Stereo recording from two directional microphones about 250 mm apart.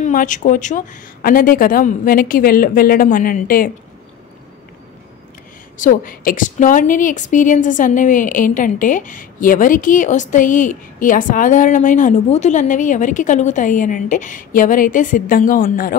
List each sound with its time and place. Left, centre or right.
0.0 s a woman's voice: left
5.8 s a woman's voice: left